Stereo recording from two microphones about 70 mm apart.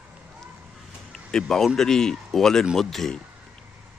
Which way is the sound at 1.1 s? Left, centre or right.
Centre.